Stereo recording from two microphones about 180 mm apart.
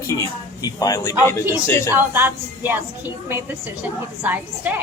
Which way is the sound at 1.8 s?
10° right (ahead or behind).